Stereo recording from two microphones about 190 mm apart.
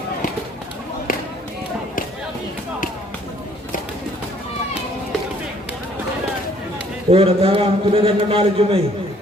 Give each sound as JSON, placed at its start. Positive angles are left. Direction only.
{"t": 7.1, "sound": "a man's voice", "side_deg": -30}